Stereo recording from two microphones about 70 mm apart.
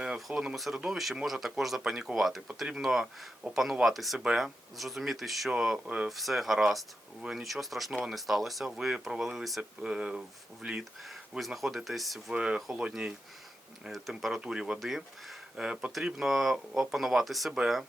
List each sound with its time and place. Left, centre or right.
0.0 s speech: centre
9.6 s speech: centre
11.0 s speech: centre
12.3 s speech: centre